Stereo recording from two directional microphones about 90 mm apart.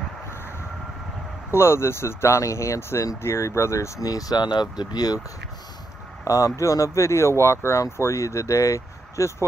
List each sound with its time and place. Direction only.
1.5 s speech: 30° left (ahead or behind); by 5.2 s 45° left (ahead or behind)
6.2 s speech: 35° left (ahead or behind)